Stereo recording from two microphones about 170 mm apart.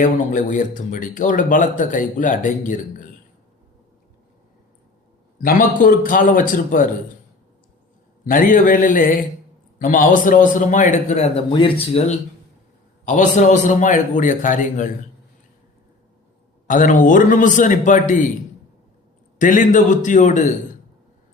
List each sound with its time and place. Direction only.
0.0 s speech: 50° left (ahead or behind)
5.4 s speech: 55° left (ahead or behind)
8.3 s speech: 50° left (ahead or behind)
11.5 s speech: 30° left (ahead or behind); by 14.8 s 50° left (ahead or behind)
16.6 s speech: 50° left (ahead or behind)
19.4 s speech: 50° left (ahead or behind)